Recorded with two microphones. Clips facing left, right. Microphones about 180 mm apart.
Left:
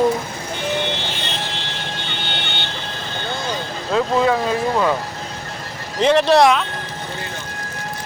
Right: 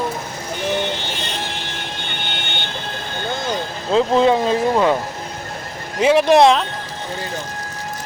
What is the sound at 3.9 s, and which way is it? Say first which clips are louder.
Speech: right 3 dB; 25° right (ahead or behind).